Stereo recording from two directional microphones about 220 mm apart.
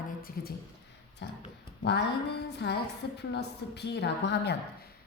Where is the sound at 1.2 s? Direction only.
55° left (ahead or behind).